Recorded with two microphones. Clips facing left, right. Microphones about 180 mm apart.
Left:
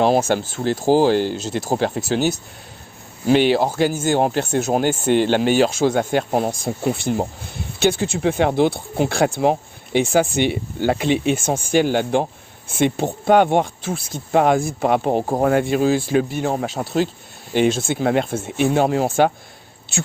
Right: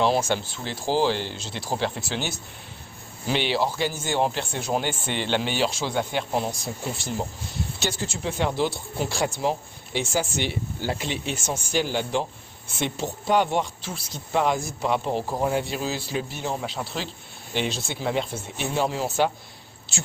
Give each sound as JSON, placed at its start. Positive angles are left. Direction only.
{"t": 0.0, "sound": "speech", "side_deg": 45}